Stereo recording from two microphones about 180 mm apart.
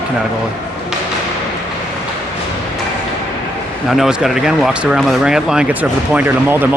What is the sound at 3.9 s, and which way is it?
Speech, 5° right (ahead or behind).